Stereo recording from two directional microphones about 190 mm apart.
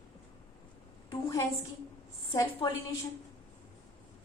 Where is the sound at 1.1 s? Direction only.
20° left (ahead or behind).